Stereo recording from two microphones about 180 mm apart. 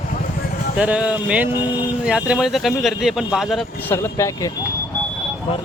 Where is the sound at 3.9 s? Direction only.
15° left (ahead or behind).